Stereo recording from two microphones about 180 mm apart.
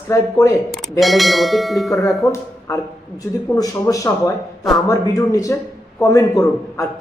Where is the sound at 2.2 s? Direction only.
15° left (ahead or behind).